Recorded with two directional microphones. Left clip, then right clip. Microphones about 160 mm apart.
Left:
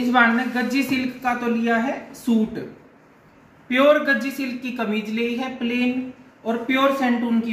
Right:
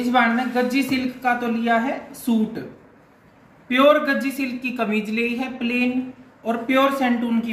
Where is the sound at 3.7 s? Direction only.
Centre (ahead or behind).